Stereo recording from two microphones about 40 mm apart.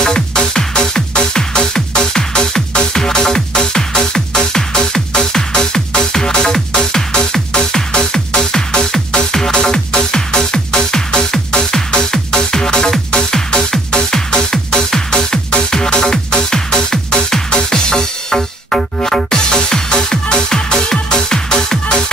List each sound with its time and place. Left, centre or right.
0.0 s music: centre